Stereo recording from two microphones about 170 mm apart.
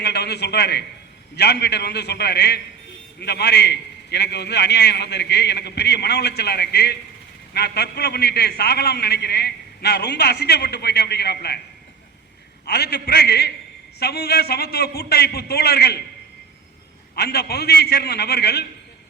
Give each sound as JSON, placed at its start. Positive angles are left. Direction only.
{"t": 0.0, "sound": "a man's voice", "side_deg": 75}
{"t": 12.6, "sound": "a man's voice", "side_deg": 75}
{"t": 17.2, "sound": "a man's voice", "side_deg": 70}